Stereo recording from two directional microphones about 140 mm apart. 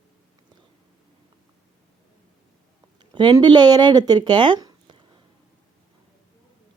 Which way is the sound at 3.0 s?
35° right (ahead or behind).